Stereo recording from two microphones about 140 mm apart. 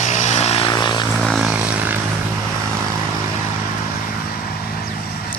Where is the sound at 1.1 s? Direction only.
Centre (ahead or behind).